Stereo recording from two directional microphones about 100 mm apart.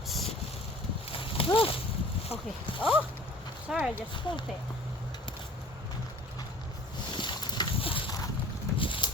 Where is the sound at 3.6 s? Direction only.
10° right (ahead or behind).